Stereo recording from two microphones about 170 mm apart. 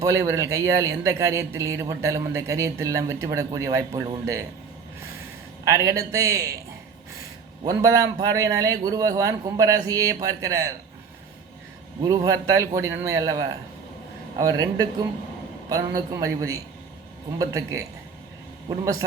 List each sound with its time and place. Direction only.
0.0 s a man's voice: 15° right (ahead or behind)
5.6 s a man's voice: 20° right (ahead or behind)
7.6 s a man's voice: 20° right (ahead or behind)
12.0 s a man's voice: 20° right (ahead or behind)